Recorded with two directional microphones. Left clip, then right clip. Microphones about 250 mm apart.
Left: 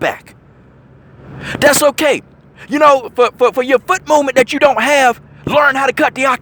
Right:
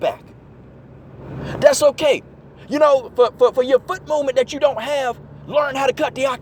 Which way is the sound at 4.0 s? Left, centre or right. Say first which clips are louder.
Left 7 dB; left.